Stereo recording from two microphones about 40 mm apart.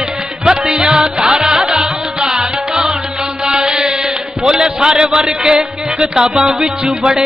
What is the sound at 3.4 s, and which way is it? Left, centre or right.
Mantra, centre.